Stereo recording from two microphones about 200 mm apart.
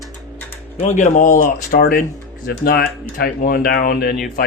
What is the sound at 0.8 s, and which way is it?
Speech, 35° left (ahead or behind).